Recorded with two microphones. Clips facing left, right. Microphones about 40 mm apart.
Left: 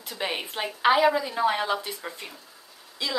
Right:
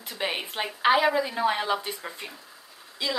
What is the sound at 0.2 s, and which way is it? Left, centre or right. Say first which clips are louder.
Speech: even; centre.